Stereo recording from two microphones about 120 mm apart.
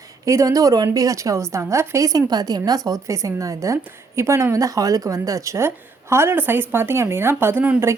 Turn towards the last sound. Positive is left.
turn(degrees=-15)  # may be behind; listen again after turning